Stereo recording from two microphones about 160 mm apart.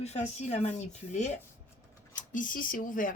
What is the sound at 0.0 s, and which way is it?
Speech, 45° left (ahead or behind).